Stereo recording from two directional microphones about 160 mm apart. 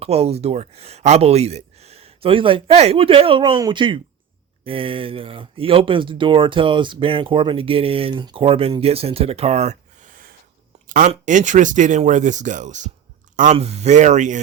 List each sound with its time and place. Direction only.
0.0 s speech: 40° right (ahead or behind); by 10.3 s 60° right (ahead or behind)
10.8 s a sound: 60° right (ahead or behind)
11.1 s speech: 50° right (ahead or behind)